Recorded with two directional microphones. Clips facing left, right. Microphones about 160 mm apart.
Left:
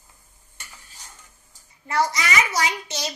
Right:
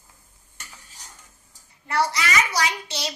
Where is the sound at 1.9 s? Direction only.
20° left (ahead or behind).